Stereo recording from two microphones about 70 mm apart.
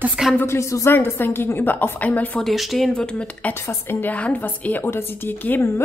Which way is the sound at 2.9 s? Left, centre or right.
Centre.